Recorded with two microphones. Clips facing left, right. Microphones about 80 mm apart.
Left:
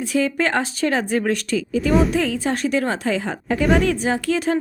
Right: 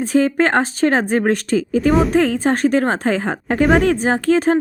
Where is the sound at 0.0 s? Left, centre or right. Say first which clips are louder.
Right 5 dB; right.